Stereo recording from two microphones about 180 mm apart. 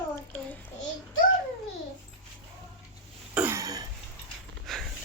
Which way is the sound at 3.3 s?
10° right (ahead or behind).